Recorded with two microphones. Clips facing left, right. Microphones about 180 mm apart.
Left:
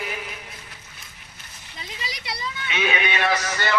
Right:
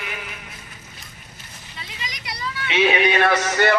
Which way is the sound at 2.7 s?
30° right (ahead or behind).